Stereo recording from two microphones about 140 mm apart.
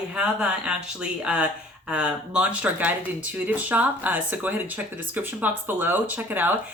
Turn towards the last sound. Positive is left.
turn(degrees=-15)  # may be behind; listen again after turning